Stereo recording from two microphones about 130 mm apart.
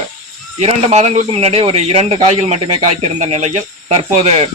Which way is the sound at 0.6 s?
55° right (ahead or behind).